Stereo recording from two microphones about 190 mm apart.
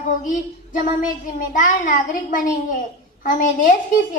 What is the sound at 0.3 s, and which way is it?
Speech, 45° left (ahead or behind).